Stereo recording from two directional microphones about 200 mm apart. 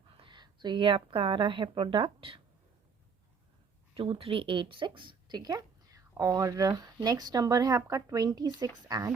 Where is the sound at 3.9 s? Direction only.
25° right (ahead or behind).